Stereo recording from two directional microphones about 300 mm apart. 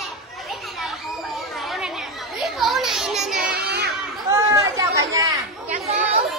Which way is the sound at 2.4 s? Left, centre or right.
Centre.